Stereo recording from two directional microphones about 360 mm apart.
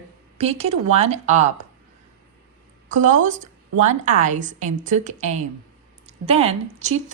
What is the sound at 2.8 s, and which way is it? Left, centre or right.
Speech, centre.